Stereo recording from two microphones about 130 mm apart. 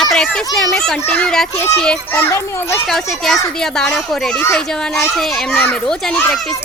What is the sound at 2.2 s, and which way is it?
Speech, 20° left (ahead or behind).